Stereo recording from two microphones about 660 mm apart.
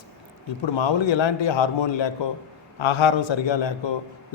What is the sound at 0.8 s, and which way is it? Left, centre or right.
A man's voice, left.